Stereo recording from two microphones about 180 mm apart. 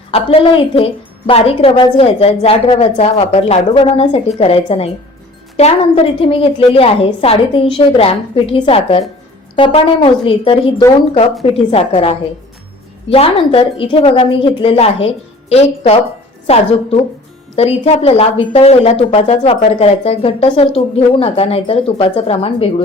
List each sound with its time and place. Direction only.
0.1 s speech: 30° left (ahead or behind)
6.1 s speech: 30° left (ahead or behind)